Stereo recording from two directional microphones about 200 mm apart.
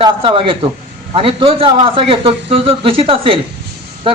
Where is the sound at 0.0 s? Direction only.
25° right (ahead or behind).